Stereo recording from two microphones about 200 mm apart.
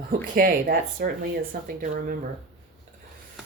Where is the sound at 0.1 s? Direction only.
45° right (ahead or behind).